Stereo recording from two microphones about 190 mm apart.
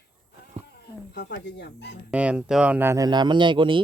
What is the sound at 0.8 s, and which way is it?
Speech, 60° left (ahead or behind).